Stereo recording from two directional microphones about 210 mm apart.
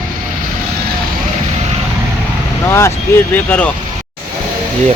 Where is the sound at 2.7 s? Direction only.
15° left (ahead or behind).